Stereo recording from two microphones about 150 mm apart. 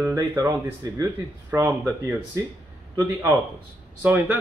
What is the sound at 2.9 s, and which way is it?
Speech, 20° right (ahead or behind).